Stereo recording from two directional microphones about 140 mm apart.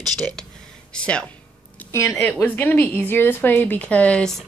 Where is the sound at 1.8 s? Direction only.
20° left (ahead or behind).